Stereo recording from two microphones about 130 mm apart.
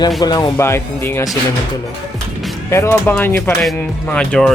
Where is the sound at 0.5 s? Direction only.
20° left (ahead or behind).